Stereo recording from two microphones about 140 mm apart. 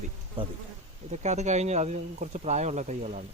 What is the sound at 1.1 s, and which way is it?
Speech, 55° right (ahead or behind).